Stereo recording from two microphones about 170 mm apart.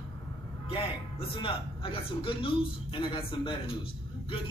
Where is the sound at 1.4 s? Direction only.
30° left (ahead or behind).